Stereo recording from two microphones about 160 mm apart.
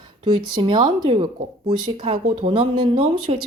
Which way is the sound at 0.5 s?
30° right (ahead or behind).